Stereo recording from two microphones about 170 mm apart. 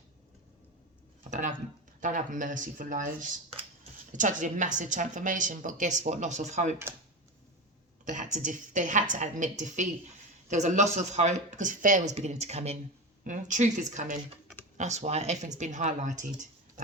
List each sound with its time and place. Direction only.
1.3 s a sound: 50° right (ahead or behind)
2.0 s a woman's voice: 50° right (ahead or behind)
8.0 s a woman's voice: 45° right (ahead or behind)